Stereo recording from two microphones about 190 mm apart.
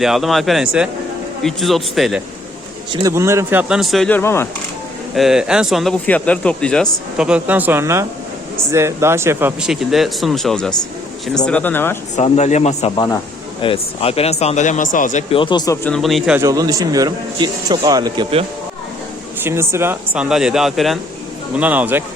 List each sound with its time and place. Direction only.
0.0 s speech: centre (ahead or behind)
2.9 s a man's voice: 15° right (ahead or behind); by 4.2 s centre (ahead or behind)
4.2 s speech: 15° left (ahead or behind)
5.1 s speech: centre (ahead or behind)
7.2 s a man's voice: 5° right (ahead or behind); by 11.9 s 10° left (ahead or behind)
12.1 s speech: 40° left (ahead or behind)
15.3 s speech: 25° left (ahead or behind)
15.9 s speech: centre (ahead or behind)
16.4 s speech: 20° right (ahead or behind)
19.4 s a man's voice: 15° right (ahead or behind)